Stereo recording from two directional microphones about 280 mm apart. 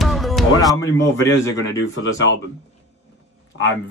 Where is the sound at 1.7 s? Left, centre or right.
Left.